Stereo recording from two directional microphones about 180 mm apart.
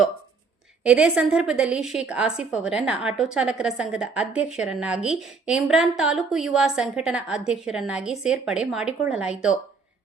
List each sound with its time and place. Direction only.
0.9 s a woman's voice: 5° right (ahead or behind)